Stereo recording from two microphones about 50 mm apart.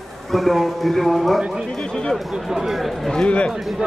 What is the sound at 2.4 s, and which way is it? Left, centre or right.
Speech, centre.